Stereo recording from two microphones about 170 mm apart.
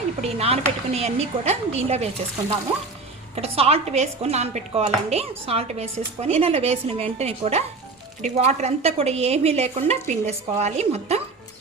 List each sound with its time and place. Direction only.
0.2 s a woman's voice: 35° right (ahead or behind)
3.3 s a woman's voice: 35° right (ahead or behind)